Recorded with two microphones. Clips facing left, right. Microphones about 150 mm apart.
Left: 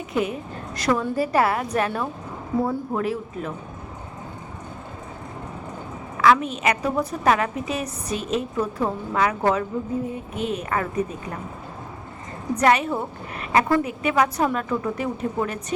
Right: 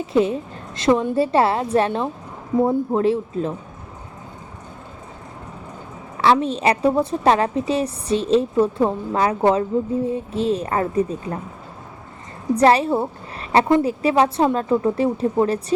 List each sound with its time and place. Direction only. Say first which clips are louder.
0.0 s a woman's voice: right 6 dB; 30° right (ahead or behind)
6.1 s a woman's voice: right 1 dB; 30° right (ahead or behind)
12.5 s a woman's voice: right 4 dB; 30° right (ahead or behind)